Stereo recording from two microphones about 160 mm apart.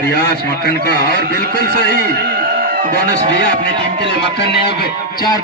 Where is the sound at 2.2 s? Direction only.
70° right (ahead or behind).